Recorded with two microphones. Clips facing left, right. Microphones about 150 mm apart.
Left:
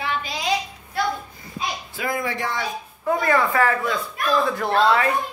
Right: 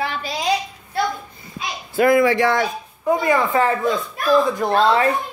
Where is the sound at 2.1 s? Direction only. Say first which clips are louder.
Right 10 dB; 90° right.